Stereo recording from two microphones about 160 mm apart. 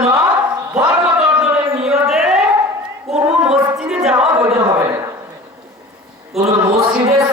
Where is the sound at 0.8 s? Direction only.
5° right (ahead or behind).